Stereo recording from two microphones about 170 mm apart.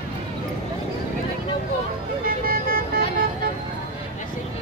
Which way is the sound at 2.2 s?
60° right (ahead or behind).